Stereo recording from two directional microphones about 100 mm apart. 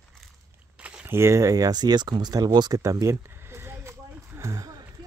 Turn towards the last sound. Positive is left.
turn(degrees=-35)  # may be behind; listen again after turning